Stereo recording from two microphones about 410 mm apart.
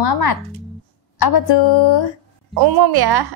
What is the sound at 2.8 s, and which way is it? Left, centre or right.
Speech, right.